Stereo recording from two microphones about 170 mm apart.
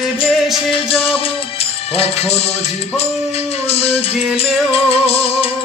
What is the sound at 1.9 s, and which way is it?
Music, 35° left (ahead or behind).